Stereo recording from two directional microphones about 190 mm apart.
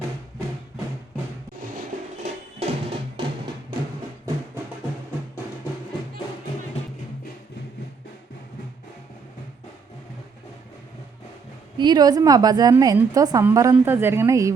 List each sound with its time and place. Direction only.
2.2 s music: 30° right (ahead or behind)
11.8 s a woman's voice: 20° right (ahead or behind)